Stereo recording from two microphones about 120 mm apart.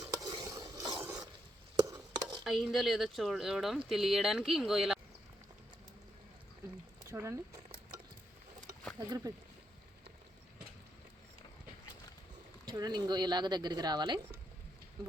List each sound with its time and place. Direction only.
0.0 s stir: 30° right (ahead or behind)
1.8 s a sound: 35° right (ahead or behind)
2.4 s speech: centre (ahead or behind)
7.1 s a sound: 25° right (ahead or behind)
9.0 s speech: 30° right (ahead or behind)
12.6 s speech: 35° right (ahead or behind)